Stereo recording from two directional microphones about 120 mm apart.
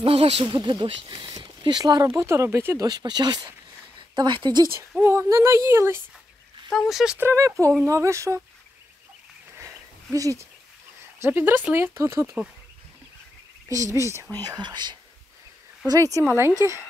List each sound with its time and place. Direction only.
0.0 s speech: 55° right (ahead or behind); by 2.0 s 35° right (ahead or behind)
2.0 s speech: 20° right (ahead or behind); by 4.6 s 40° right (ahead or behind)
5.0 s speech: 20° right (ahead or behind)
6.7 s speech: centre (ahead or behind)
7.2 s speech: 20° right (ahead or behind)
9.6 s a sound: 25° right (ahead or behind)
11.1 s speech: 15° right (ahead or behind)
13.7 s speech: 25° right (ahead or behind)
15.9 s speech: 30° right (ahead or behind)